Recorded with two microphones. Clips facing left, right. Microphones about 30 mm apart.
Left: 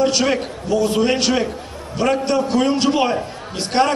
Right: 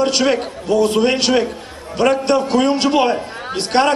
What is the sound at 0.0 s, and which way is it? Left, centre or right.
A man's voice, right.